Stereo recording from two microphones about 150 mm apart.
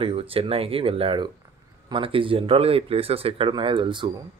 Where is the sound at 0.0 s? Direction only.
40° right (ahead or behind).